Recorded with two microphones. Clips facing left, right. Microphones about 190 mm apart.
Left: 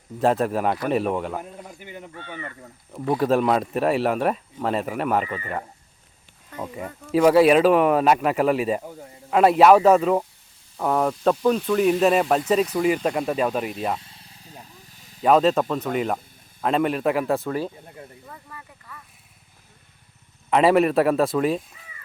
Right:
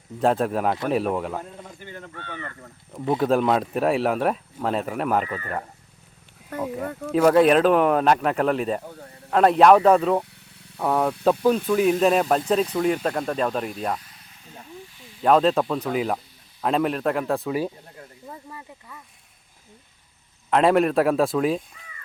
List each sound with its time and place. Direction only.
0.2 s speech: centre (ahead or behind)
1.4 s a man's voice: 15° left (ahead or behind)
3.2 s speech: centre (ahead or behind)
7.1 s speech: 5° left (ahead or behind)
14.0 s a sound: 30° left (ahead or behind)
15.2 s speech: centre (ahead or behind)
18.3 s a sound: 20° right (ahead or behind)
20.5 s speech: 5° left (ahead or behind)